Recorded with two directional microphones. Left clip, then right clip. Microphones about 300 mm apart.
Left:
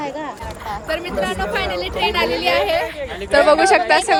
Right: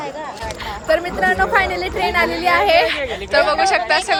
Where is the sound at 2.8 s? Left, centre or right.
Right.